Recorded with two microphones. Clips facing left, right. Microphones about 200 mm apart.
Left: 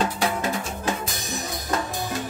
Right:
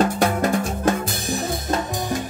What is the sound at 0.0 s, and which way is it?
Music, 45° right (ahead or behind).